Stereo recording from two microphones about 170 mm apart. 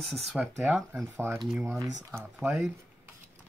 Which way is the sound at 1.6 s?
15° right (ahead or behind).